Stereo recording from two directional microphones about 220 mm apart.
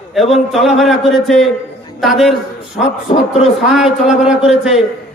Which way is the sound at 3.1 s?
30° left (ahead or behind).